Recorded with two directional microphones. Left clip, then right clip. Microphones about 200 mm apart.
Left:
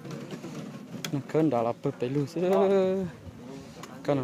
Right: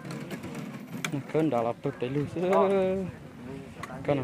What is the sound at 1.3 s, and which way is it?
Speech, 20° left (ahead or behind).